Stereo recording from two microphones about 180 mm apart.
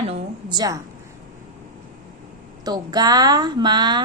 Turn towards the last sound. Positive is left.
turn(degrees=-25)  # may be behind; listen again after turning